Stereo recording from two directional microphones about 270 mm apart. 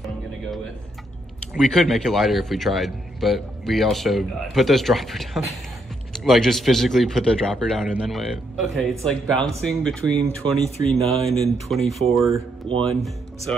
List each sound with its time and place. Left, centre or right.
1.5 s speech: centre